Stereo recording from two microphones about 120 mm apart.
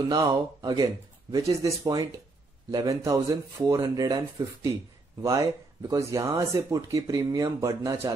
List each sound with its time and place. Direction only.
0.1 s speech: 30° right (ahead or behind)